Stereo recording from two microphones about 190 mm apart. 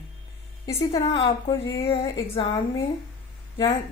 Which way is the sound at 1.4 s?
25° left (ahead or behind).